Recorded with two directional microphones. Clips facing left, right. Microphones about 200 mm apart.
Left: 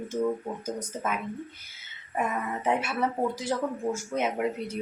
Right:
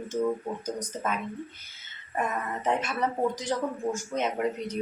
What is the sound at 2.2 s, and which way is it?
A woman's voice, 10° left (ahead or behind).